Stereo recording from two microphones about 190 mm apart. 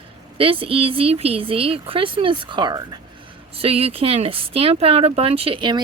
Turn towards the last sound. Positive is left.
turn(degrees=-25)  # may be behind; listen again after turning